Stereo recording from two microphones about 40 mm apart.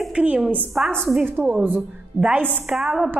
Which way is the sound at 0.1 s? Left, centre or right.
Right.